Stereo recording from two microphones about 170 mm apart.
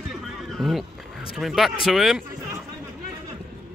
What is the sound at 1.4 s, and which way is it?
Speech, centre (ahead or behind).